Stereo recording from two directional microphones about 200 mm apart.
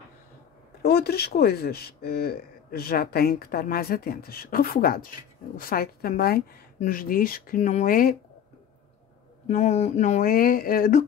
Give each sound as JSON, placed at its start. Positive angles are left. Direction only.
{"t": 0.8, "sound": "speech", "side_deg": 55}
{"t": 9.5, "sound": "speech", "side_deg": 35}